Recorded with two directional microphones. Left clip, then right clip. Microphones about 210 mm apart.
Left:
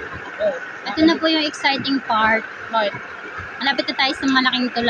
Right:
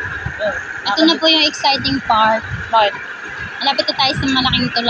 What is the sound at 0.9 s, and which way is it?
Speech, 20° left (ahead or behind).